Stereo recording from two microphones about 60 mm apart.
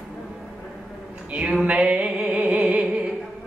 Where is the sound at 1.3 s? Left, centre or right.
Centre.